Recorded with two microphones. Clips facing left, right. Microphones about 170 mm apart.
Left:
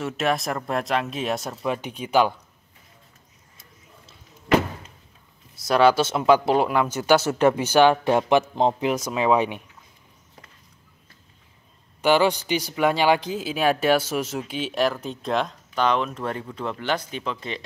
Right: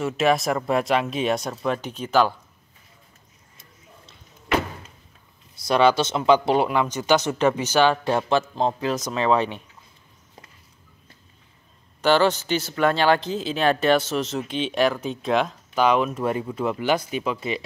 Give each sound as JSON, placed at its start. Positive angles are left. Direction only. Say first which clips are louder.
{"t": 0.0, "sound": "speech", "louder": "right 4 dB", "side_deg": 0}
{"t": 5.7, "sound": "speech", "louder": "left 1 dB", "side_deg": 5}
{"t": 12.0, "sound": "speech", "louder": "even", "side_deg": 10}